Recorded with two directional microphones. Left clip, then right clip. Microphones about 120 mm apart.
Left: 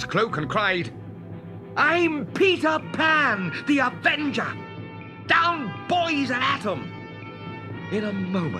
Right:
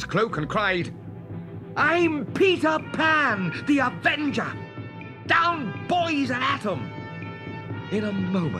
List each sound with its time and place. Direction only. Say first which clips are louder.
0.0 s speech: left 1 dB; 20° right (ahead or behind)
7.9 s speech: even; 25° right (ahead or behind)